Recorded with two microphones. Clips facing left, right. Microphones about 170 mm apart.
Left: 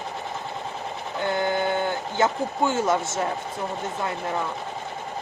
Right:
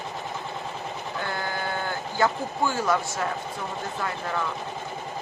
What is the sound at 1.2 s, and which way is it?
Speech, 20° left (ahead or behind).